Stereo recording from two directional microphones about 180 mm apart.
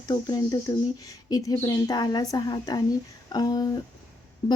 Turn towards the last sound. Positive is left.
turn(degrees=25)  # may be behind; listen again after turning